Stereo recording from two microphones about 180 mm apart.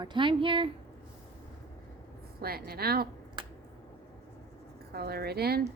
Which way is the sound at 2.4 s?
60° right (ahead or behind).